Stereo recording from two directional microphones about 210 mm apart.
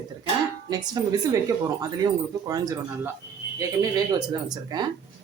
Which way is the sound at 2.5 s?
15° right (ahead or behind).